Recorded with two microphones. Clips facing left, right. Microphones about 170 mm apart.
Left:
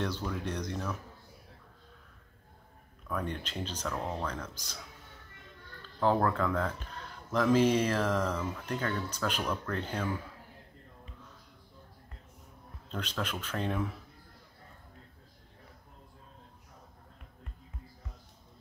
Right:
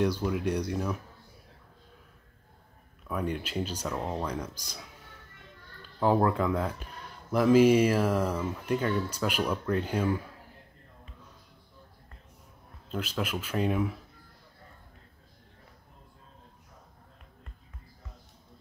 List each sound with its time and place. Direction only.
0.0 s speech: 10° right (ahead or behind)
3.1 s speech: 10° right (ahead or behind)
5.9 s speech: 10° right (ahead or behind)
12.9 s speech: 10° right (ahead or behind)